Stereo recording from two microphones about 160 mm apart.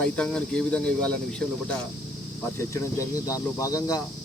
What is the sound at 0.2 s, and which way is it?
Speech, 5° left (ahead or behind).